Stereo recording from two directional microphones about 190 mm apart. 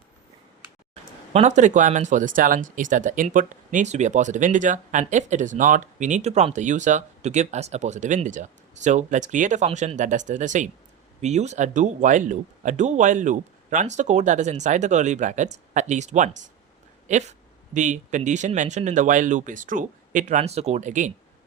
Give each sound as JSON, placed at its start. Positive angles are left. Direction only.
{"t": 1.3, "sound": "speech", "side_deg": -35}